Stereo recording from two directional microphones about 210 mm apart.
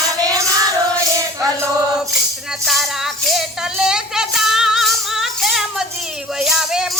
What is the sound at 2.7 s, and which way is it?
Music, centre (ahead or behind).